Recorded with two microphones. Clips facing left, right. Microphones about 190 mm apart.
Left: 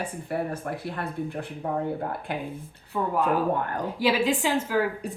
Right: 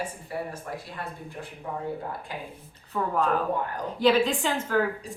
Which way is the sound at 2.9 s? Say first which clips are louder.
Left 1 dB; 10° left (ahead or behind).